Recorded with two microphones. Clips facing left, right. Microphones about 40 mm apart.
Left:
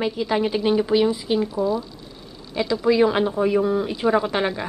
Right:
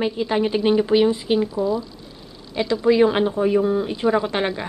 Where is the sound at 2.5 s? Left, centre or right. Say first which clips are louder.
Right 2 dB; centre.